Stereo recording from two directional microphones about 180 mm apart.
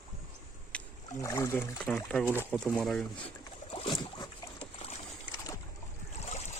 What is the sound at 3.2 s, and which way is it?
Boat, 30° left (ahead or behind).